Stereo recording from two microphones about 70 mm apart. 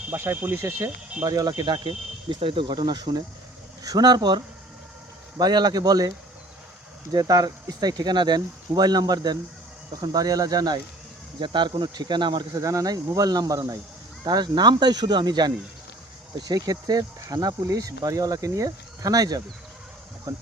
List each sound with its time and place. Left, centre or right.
0.1 s speech: right
1.2 s speech: right
11.5 s speech: right
12.6 s speech: right
14.3 s speech: right
16.6 s speech: right
20.3 s speech: right